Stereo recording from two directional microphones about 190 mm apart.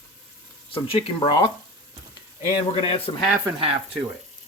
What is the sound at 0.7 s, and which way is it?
Speech, 25° left (ahead or behind).